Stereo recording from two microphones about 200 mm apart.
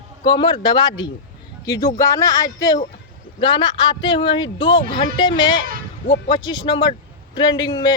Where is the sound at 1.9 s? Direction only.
15° left (ahead or behind).